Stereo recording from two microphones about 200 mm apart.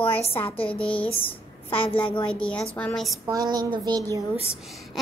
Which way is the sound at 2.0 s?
25° left (ahead or behind).